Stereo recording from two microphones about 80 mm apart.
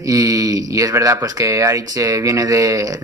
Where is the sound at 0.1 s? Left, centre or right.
Right.